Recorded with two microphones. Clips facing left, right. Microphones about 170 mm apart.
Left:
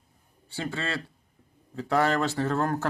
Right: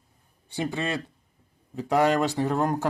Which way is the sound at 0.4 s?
20° right (ahead or behind).